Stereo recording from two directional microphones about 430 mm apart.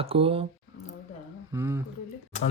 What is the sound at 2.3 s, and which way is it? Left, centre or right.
Speech, centre.